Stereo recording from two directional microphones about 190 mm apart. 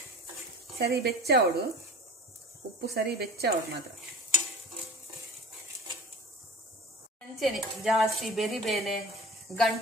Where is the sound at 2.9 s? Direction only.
55° right (ahead or behind).